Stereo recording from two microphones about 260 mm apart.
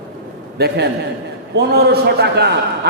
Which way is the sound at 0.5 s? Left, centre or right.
Right.